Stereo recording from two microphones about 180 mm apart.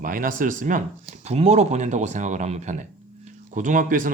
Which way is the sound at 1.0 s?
35° right (ahead or behind).